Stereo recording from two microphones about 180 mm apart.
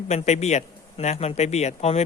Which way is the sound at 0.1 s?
40° left (ahead or behind).